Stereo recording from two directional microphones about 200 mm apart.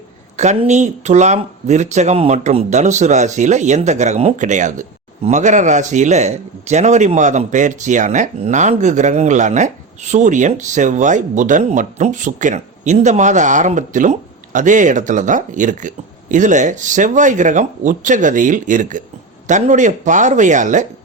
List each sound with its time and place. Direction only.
0.3 s speech: 35° right (ahead or behind)